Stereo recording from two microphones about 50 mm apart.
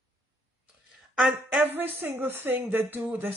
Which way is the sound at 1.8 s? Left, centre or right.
Right.